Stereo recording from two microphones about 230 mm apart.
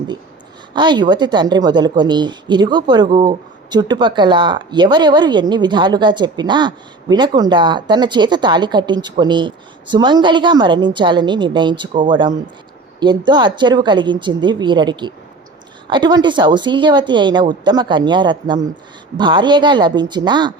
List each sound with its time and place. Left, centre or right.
0.7 s speech: centre